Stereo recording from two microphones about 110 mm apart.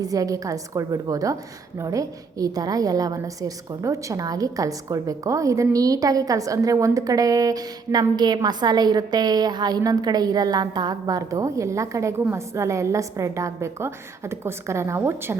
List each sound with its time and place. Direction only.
0.0 s a woman's voice: 35° right (ahead or behind)